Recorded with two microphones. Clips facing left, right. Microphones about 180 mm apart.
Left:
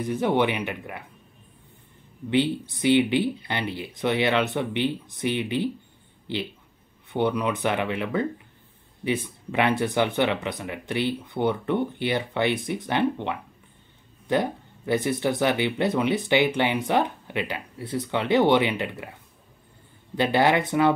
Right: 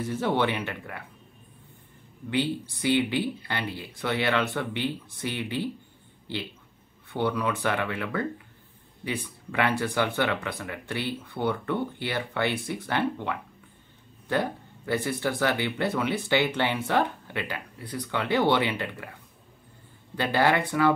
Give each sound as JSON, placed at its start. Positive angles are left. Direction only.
{"t": 0.0, "sound": "speech", "side_deg": 15}
{"t": 2.3, "sound": "speech", "side_deg": 20}
{"t": 7.1, "sound": "speech", "side_deg": 20}
{"t": 20.2, "sound": "speech", "side_deg": 20}